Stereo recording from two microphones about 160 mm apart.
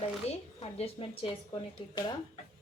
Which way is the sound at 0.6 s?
35° left (ahead or behind).